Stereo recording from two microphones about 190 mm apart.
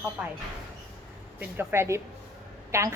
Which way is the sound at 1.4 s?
10° right (ahead or behind).